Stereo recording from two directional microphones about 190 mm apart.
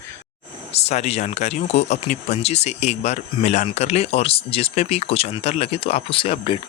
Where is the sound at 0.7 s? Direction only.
35° left (ahead or behind).